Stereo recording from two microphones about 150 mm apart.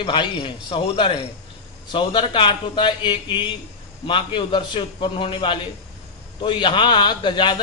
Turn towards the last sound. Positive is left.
turn(degrees=30)  # may be behind; listen again after turning